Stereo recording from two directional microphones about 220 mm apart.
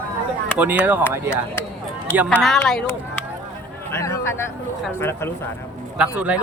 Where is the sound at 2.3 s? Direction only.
Centre (ahead or behind).